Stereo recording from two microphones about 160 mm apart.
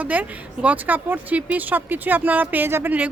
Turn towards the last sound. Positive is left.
turn(degrees=-10)  # may be behind; listen again after turning